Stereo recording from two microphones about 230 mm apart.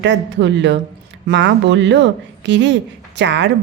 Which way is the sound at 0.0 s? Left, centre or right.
Right.